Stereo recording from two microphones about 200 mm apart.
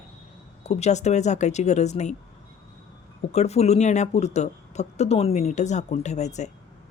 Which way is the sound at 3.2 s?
35° left (ahead or behind).